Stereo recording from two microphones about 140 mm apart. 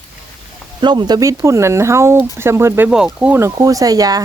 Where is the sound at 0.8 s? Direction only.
30° right (ahead or behind).